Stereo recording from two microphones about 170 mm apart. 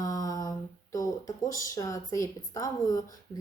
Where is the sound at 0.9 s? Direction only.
20° left (ahead or behind).